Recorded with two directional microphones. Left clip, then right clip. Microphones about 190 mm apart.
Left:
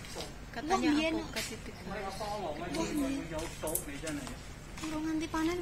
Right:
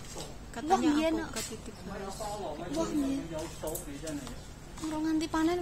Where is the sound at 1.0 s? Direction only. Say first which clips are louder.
Right 2 dB; 50° right (ahead or behind).